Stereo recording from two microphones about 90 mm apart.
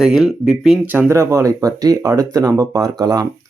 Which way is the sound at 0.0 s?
5° right (ahead or behind).